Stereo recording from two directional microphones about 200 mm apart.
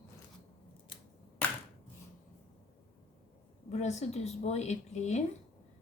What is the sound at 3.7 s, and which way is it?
Speech, 35° left (ahead or behind).